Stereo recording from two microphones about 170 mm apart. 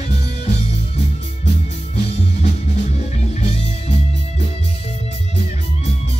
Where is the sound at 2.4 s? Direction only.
40° left (ahead or behind).